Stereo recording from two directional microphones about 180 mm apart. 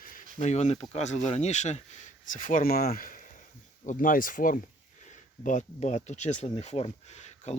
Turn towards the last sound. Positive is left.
turn(degrees=40)  # may be behind; listen again after turning